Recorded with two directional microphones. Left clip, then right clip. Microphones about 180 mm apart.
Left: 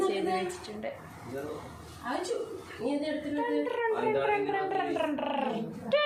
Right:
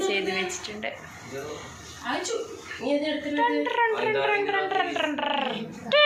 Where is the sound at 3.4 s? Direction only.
Centre (ahead or behind).